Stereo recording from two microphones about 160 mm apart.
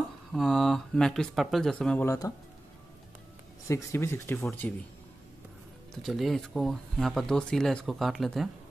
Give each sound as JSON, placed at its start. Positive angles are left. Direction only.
{"t": 0.3, "sound": "speech", "side_deg": 0}
{"t": 2.0, "sound": "speech", "side_deg": 20}
{"t": 3.6, "sound": "speech", "side_deg": 15}
{"t": 6.0, "sound": "speech", "side_deg": 0}